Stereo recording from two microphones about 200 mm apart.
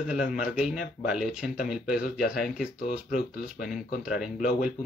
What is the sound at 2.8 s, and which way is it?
Speech, 40° left (ahead or behind).